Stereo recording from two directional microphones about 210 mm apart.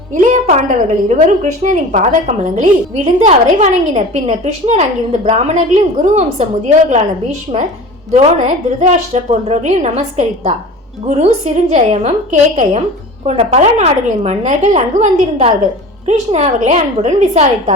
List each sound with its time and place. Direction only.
0.1 s a woman's voice: 35° right (ahead or behind)